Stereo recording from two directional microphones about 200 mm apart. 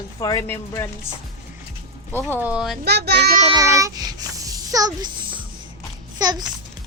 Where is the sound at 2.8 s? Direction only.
55° right (ahead or behind).